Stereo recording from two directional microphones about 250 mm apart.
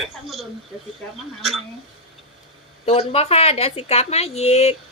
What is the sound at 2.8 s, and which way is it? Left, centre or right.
A woman's voice, left.